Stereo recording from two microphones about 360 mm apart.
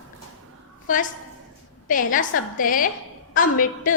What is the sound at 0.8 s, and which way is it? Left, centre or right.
A woman's voice, left.